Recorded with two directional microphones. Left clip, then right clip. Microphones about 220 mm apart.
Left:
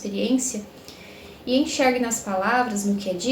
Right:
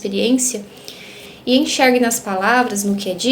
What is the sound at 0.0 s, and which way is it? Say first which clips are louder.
Speech: right 7 dB; 40° right (ahead or behind).